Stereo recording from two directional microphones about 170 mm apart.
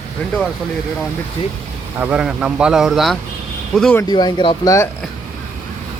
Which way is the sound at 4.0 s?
25° left (ahead or behind).